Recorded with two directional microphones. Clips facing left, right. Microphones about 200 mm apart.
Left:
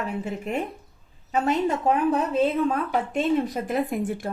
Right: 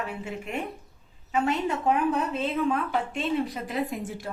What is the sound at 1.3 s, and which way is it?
A woman's voice, 40° left (ahead or behind).